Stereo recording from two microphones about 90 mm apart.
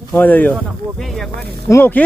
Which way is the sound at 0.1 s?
20° left (ahead or behind).